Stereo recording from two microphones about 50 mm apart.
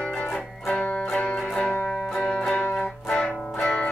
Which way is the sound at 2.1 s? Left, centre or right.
Centre.